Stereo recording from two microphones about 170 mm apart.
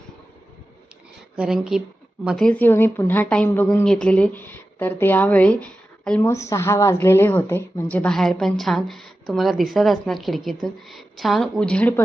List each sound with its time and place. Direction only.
1.4 s a woman's voice: 5° right (ahead or behind)